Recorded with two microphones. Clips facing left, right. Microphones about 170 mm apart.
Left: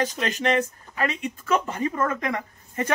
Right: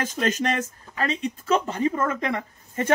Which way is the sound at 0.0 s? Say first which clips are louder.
Right 1 dB; 45° right (ahead or behind).